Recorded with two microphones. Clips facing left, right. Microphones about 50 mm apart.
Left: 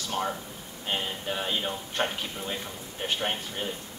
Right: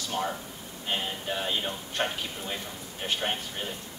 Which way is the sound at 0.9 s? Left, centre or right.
Centre.